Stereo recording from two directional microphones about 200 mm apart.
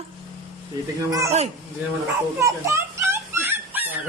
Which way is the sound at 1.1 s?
15° right (ahead or behind).